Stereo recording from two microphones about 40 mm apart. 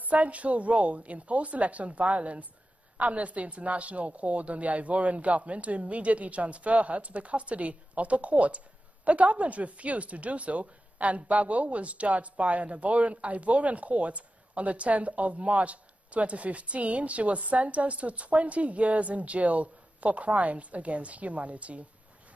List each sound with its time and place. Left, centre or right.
0.0 s a woman's voice: right